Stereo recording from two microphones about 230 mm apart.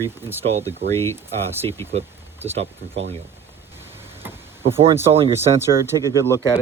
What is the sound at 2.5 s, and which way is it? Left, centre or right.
Speech, right.